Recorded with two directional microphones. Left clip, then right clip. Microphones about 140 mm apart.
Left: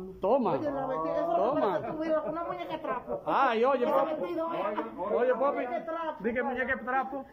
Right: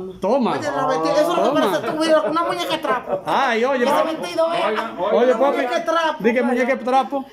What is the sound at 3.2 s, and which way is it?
Speech, 15° left (ahead or behind).